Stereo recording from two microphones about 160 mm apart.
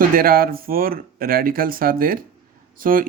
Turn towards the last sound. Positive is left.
turn(degrees=-60)  # may be behind; listen again after turning